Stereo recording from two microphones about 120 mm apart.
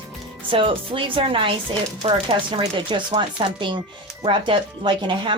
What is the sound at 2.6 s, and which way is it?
Speech, 40° right (ahead or behind).